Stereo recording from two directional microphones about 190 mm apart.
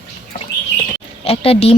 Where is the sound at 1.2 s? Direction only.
30° left (ahead or behind).